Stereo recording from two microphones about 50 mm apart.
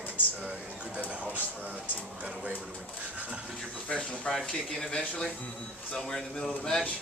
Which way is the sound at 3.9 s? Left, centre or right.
Left.